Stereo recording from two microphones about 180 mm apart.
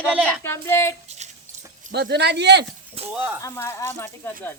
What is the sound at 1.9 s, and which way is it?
Speech, 70° right (ahead or behind).